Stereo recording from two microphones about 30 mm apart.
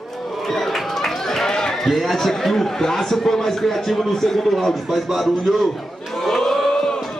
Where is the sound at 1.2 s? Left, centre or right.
Centre.